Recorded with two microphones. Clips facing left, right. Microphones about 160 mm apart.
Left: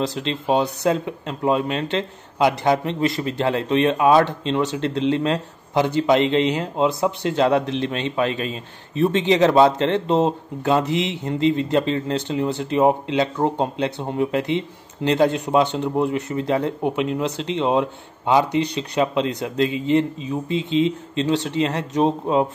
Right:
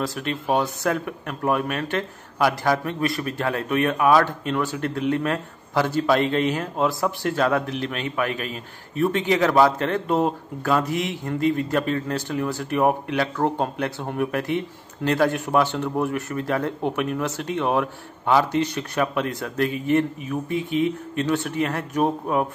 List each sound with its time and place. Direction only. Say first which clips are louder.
0.0 s speech: left 3 dB; 25° left (ahead or behind)